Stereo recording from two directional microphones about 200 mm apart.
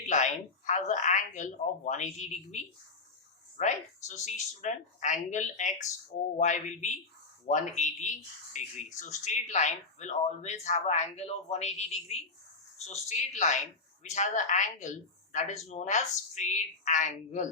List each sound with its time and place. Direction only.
0.1 s speech: 35° left (ahead or behind)
3.6 s speech: 35° left (ahead or behind)